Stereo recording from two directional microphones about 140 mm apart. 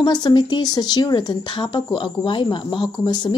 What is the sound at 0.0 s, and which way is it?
Speech, 30° left (ahead or behind).